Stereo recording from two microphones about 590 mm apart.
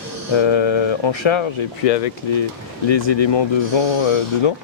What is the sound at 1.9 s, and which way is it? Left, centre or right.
Speech, left.